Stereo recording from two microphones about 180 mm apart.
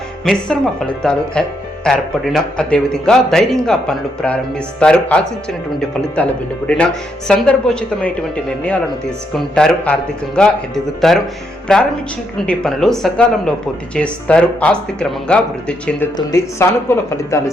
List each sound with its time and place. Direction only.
0.3 s speech: 5° left (ahead or behind)
7.3 s speech: 5° left (ahead or behind)
16.1 s speech: 15° left (ahead or behind)